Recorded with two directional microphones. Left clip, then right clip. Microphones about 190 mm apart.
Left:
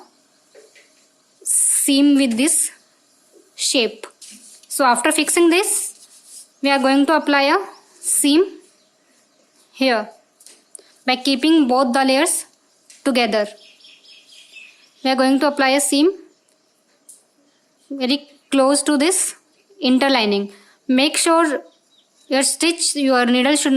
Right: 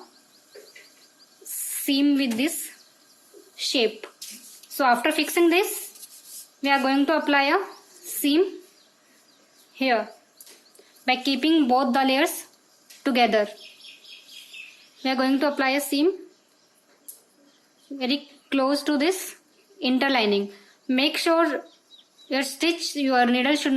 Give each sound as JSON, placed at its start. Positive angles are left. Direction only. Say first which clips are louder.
{"t": 1.7, "sound": "a woman's voice", "louder": "left 7 dB", "side_deg": 30}
{"t": 9.7, "sound": "a woman's voice", "louder": "left 5 dB", "side_deg": 30}
{"t": 15.0, "sound": "a woman's voice", "louder": "left 7 dB", "side_deg": 25}
{"t": 17.9, "sound": "a woman's voice", "louder": "left 6 dB", "side_deg": 30}